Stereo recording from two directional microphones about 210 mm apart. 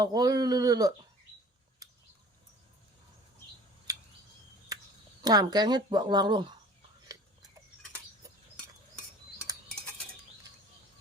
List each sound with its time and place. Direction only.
0.0 s speech: 20° right (ahead or behind)
4.7 s a sound: 15° right (ahead or behind)
5.2 s speech: 20° right (ahead or behind)